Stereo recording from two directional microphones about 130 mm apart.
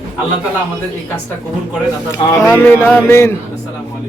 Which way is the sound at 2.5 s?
15° left (ahead or behind).